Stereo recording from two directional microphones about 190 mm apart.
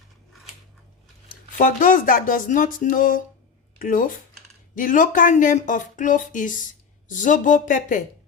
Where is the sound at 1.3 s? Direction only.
45° left (ahead or behind).